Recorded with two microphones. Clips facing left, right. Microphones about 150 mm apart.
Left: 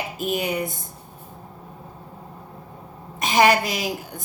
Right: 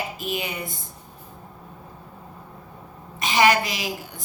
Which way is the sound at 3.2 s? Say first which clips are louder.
Left 2 dB; 50° left (ahead or behind).